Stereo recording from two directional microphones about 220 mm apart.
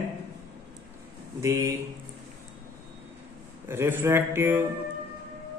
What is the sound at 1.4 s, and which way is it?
Speech, 15° right (ahead or behind).